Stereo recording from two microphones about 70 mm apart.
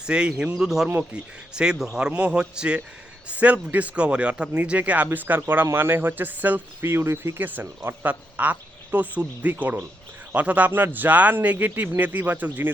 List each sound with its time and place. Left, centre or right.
0.0 s speech: centre
6.9 s speech: right